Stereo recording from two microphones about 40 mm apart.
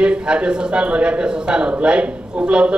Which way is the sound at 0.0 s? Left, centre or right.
Right.